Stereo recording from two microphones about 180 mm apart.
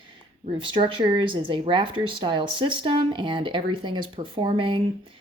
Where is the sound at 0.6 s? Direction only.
30° right (ahead or behind).